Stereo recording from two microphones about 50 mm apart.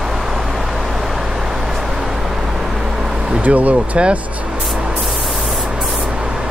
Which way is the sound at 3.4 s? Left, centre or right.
Right.